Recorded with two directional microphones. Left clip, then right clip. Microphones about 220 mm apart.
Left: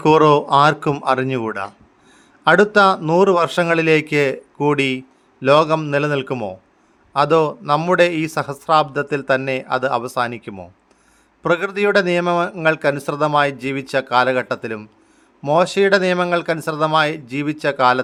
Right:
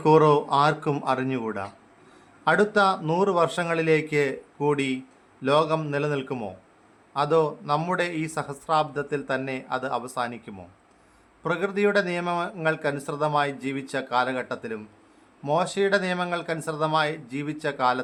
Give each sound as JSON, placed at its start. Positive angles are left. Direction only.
{"t": 0.0, "sound": "speech", "side_deg": 30}